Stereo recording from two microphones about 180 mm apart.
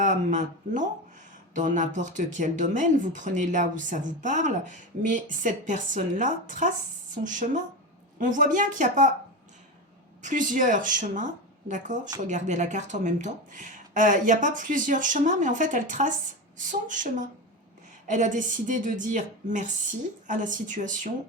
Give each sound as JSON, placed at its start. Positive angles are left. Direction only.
{"t": 0.0, "sound": "speech", "side_deg": -45}
{"t": 10.2, "sound": "speech", "side_deg": -45}